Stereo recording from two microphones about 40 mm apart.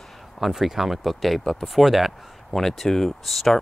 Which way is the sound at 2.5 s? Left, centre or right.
Centre.